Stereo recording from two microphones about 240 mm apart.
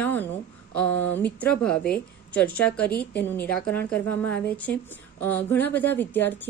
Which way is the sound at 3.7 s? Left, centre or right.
Centre.